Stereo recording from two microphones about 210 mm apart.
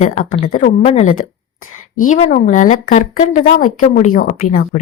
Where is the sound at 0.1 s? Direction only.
40° left (ahead or behind).